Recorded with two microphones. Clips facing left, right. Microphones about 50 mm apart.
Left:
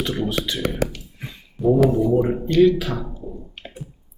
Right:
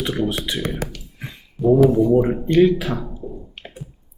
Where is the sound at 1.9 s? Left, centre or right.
Centre.